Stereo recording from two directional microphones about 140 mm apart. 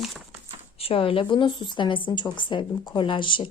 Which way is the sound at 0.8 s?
40° left (ahead or behind).